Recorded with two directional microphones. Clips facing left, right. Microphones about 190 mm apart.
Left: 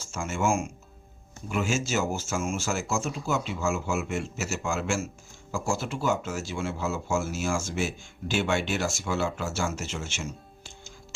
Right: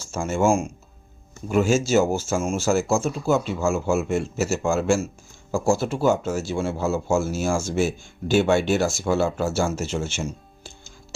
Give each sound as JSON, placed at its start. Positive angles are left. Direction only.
{"t": 0.1, "sound": "speech", "side_deg": -35}